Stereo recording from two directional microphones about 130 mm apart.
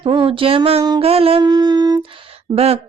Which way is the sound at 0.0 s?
40° right (ahead or behind).